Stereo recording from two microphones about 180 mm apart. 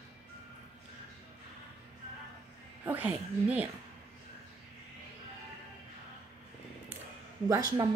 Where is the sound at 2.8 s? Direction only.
10° right (ahead or behind).